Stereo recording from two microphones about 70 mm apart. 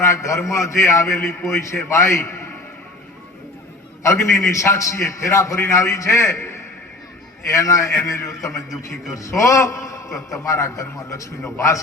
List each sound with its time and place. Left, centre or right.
0.0 s a man's voice: left
4.0 s a man's voice: left
8.5 s a man's voice: centre
9.1 s a man's voice: left